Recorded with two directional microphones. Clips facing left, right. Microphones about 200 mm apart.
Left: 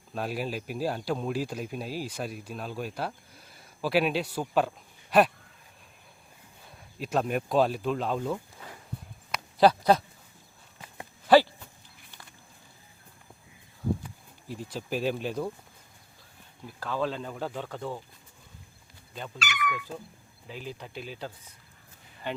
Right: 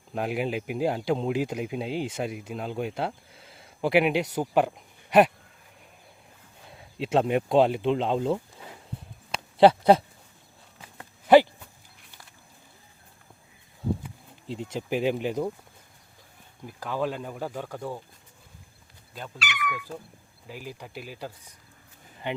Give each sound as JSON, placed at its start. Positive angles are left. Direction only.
{"t": 0.1, "sound": "speech", "side_deg": -20}
{"t": 7.0, "sound": "speech", "side_deg": -25}
{"t": 9.3, "sound": "a sound", "side_deg": -25}
{"t": 11.3, "sound": "speech", "side_deg": -20}
{"t": 14.4, "sound": "speech", "side_deg": -25}
{"t": 16.6, "sound": "speech", "side_deg": -15}
{"t": 19.4, "sound": "speech", "side_deg": 45}
{"t": 20.5, "sound": "speech", "side_deg": -10}